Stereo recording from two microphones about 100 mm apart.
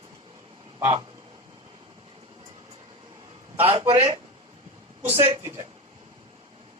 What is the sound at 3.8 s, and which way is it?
Speech, 45° right (ahead or behind).